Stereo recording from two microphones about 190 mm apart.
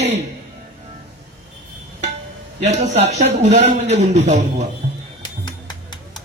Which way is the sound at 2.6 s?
35° right (ahead or behind).